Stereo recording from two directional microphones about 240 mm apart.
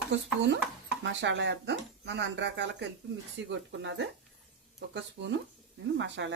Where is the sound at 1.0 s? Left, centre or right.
Right.